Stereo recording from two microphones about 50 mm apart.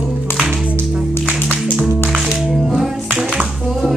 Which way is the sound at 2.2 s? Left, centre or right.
Centre.